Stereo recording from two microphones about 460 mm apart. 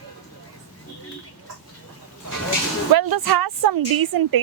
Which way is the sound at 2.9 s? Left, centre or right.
Right.